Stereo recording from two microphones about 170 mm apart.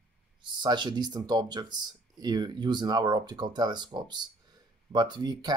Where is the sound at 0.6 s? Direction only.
25° right (ahead or behind).